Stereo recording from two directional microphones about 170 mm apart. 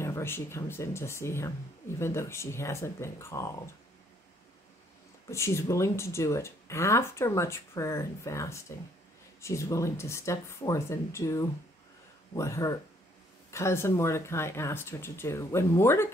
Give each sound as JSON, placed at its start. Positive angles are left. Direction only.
{"t": 0.0, "sound": "speech", "side_deg": 15}
{"t": 5.3, "sound": "speech", "side_deg": 15}